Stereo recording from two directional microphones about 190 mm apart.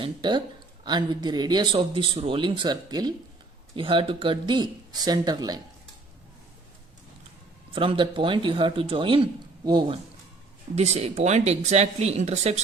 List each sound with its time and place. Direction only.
0.0 s speech: 25° right (ahead or behind)
7.7 s speech: 25° right (ahead or behind)